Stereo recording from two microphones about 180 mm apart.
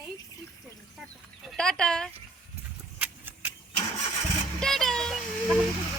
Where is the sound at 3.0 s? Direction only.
10° right (ahead or behind).